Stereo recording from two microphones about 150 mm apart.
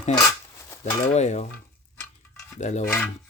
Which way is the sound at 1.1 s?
50° left (ahead or behind).